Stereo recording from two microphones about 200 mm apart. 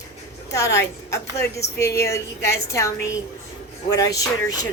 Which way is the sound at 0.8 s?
15° left (ahead or behind).